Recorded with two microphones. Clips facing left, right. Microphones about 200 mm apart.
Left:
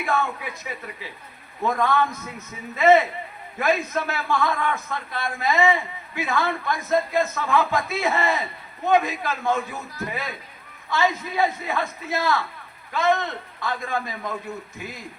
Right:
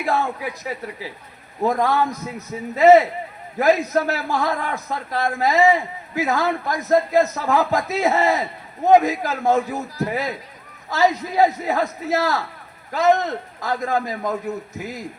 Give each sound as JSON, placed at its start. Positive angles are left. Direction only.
{"t": 0.0, "sound": "a man's voice", "side_deg": -35}